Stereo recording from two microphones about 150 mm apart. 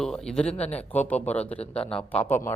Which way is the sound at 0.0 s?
5° left (ahead or behind).